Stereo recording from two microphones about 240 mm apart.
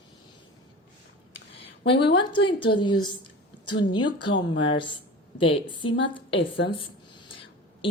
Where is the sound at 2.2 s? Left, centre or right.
Centre.